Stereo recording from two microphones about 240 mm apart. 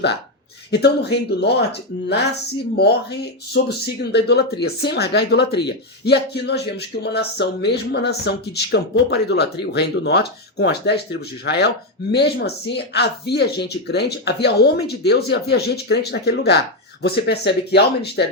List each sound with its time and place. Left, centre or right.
0.7 s speech: left